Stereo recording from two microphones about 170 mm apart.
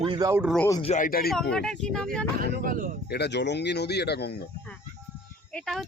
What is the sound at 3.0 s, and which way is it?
Speech, 75° left (ahead or behind).